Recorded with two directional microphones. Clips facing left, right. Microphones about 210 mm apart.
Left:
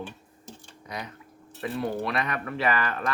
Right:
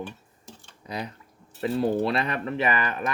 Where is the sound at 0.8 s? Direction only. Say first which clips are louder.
Right 4 dB; 30° right (ahead or behind).